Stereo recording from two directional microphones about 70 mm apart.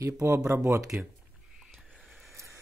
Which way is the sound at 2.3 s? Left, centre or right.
Right.